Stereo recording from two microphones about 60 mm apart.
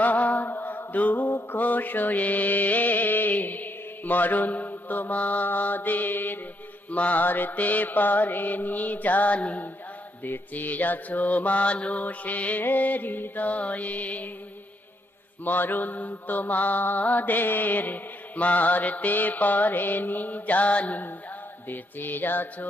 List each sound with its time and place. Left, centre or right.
0.0 s mantra: left
15.4 s mantra: left
21.6 s music: left